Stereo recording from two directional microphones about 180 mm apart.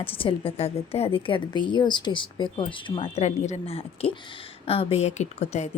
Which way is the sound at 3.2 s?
40° left (ahead or behind).